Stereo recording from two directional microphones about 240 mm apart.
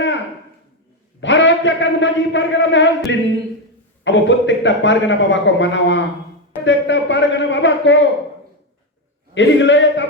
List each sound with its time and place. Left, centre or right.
1.2 s a man's voice: left
9.3 s a man's voice: left